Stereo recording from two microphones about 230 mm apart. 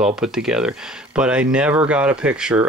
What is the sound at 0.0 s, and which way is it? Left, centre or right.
Speech, centre.